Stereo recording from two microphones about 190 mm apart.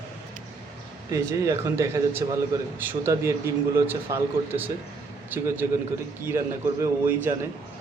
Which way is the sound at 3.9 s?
10° right (ahead or behind).